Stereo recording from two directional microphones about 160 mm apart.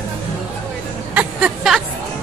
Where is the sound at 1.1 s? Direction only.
10° right (ahead or behind).